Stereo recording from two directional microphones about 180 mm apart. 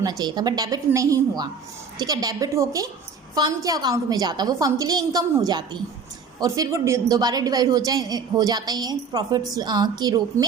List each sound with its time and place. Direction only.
0.0 s a woman's voice: 20° right (ahead or behind)